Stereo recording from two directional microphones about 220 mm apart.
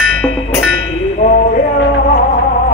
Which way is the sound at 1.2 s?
35° left (ahead or behind).